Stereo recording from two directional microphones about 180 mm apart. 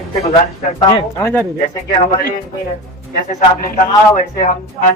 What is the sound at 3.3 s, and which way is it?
Speech, 40° left (ahead or behind).